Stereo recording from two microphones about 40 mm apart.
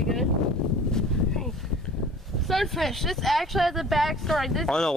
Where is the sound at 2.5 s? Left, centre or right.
Centre.